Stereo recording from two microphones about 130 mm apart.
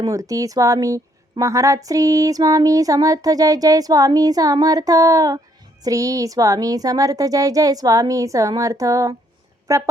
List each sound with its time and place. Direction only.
0.0 s a woman's voice: 25° right (ahead or behind)